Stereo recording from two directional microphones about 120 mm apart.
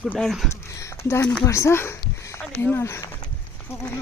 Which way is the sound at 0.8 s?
25° left (ahead or behind).